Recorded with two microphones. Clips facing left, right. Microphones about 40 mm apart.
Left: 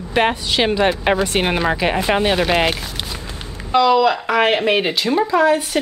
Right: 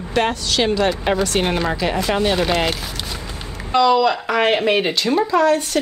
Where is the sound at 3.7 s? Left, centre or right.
Centre.